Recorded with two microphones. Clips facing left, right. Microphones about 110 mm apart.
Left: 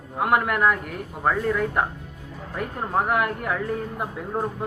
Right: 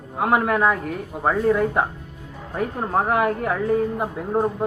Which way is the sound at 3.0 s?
30° right (ahead or behind).